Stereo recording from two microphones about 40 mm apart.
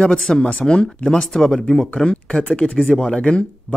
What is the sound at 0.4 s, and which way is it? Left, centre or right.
Speech, left.